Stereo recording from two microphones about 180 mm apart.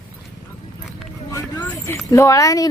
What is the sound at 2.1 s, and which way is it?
Speech, 15° left (ahead or behind).